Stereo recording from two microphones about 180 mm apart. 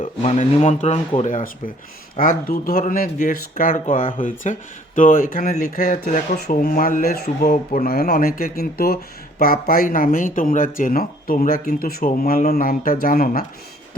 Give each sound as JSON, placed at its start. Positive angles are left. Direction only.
{"t": 0.0, "sound": "speech", "side_deg": 35}